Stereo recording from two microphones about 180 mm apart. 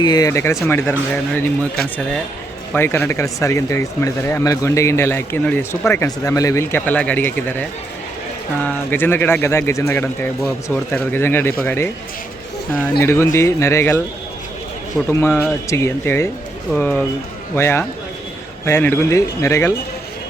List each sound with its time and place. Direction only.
0.0 s speech: 20° left (ahead or behind)
2.7 s speech: 10° left (ahead or behind)
8.6 s speech: 10° left (ahead or behind)
13.0 s speech: 15° left (ahead or behind)
15.1 s speech: 15° left (ahead or behind)